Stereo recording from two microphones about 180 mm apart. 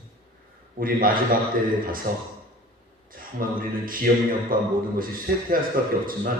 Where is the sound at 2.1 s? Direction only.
50° right (ahead or behind).